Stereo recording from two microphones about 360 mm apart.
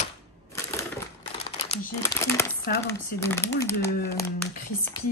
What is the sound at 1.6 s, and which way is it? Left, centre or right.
Speech, centre.